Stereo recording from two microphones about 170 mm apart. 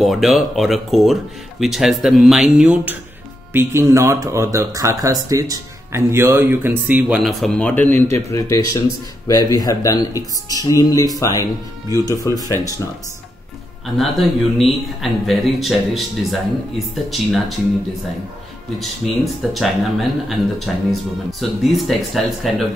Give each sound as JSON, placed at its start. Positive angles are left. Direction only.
{"t": 0.0, "sound": "speech", "side_deg": 0}
{"t": 12.4, "sound": "speech", "side_deg": -20}
{"t": 13.8, "sound": "speech", "side_deg": 0}
{"t": 19.2, "sound": "speech", "side_deg": 0}